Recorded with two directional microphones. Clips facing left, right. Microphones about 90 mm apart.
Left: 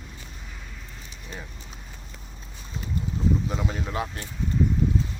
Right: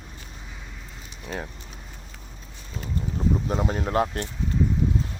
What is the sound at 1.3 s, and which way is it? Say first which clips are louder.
Speech: right 7 dB; 60° right (ahead or behind).